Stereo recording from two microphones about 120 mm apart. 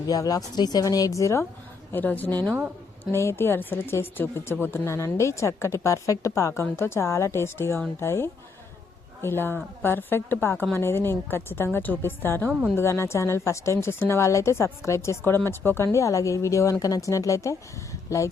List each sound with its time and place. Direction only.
0.1 s speech: 30° left (ahead or behind)
1.9 s a woman's voice: 15° left (ahead or behind)